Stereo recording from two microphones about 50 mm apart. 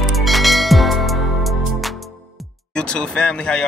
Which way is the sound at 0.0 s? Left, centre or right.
Centre.